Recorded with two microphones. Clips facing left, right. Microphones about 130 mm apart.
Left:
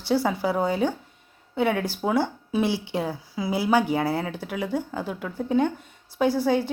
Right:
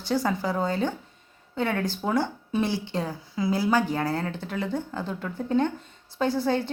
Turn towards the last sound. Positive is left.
turn(degrees=5)  # may be behind; listen again after turning